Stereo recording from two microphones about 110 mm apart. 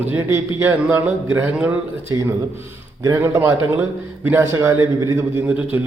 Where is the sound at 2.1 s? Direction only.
30° right (ahead or behind).